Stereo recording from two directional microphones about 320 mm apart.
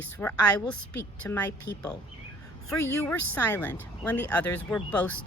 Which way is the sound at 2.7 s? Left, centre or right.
Left.